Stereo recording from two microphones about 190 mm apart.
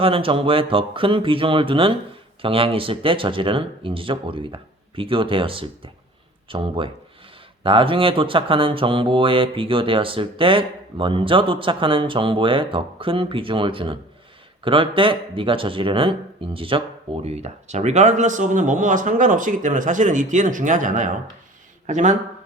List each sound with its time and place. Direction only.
0.0 s speech: 30° right (ahead or behind)